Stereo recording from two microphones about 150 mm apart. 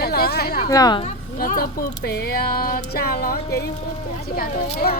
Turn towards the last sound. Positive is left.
turn(degrees=90)